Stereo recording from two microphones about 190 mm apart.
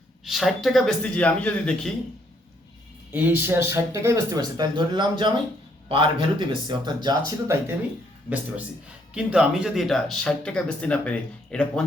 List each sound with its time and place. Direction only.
0.3 s speech: centre (ahead or behind)
3.1 s speech: 10° right (ahead or behind)
9.1 s speech: 5° right (ahead or behind)